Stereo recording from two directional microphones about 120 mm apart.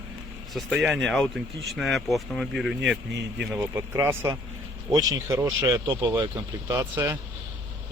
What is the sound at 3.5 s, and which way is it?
Speech, 25° right (ahead or behind).